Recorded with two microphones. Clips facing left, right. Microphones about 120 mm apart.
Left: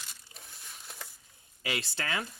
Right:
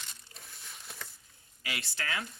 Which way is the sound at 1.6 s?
30° left (ahead or behind).